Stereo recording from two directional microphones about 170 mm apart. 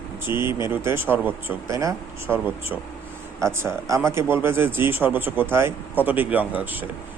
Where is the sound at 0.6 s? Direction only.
15° right (ahead or behind).